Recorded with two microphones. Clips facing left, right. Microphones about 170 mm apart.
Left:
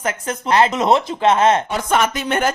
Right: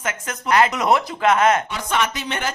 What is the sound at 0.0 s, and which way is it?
Speech, 30° left (ahead or behind).